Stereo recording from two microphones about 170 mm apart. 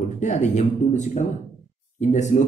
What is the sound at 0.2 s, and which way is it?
Speech, 45° left (ahead or behind).